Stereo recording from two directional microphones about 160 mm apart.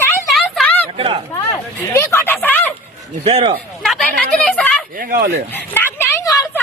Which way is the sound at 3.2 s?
35° right (ahead or behind).